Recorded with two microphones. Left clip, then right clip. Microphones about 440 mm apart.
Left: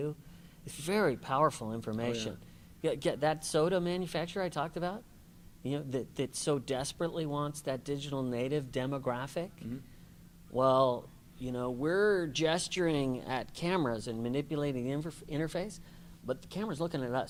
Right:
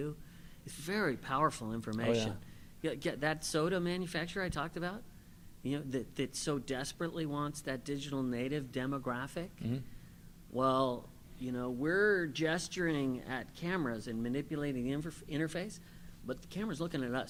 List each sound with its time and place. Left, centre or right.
0.6 s speech: centre
10.5 s speech: centre